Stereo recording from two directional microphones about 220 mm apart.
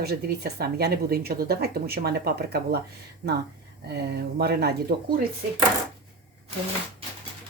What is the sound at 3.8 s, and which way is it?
Speech, 50° right (ahead or behind).